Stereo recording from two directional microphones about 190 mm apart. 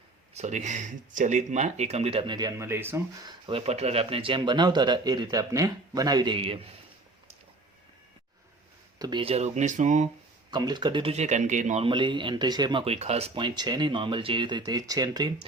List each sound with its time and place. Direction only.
0.3 s speech: 40° right (ahead or behind); by 3.3 s 10° right (ahead or behind)
3.4 s speech: 30° right (ahead or behind)
9.0 s speech: 25° right (ahead or behind); by 10.1 s 40° right (ahead or behind)
10.5 s speech: 20° right (ahead or behind)